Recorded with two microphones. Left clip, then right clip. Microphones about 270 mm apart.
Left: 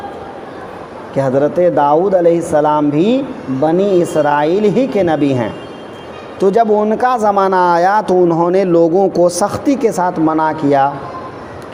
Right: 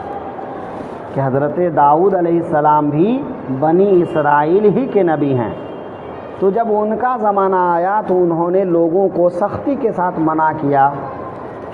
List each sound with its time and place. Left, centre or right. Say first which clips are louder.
1.1 s speech: left 4 dB; left